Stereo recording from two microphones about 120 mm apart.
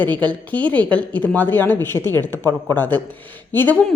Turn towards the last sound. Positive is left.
turn(degrees=15)  # may be behind; listen again after turning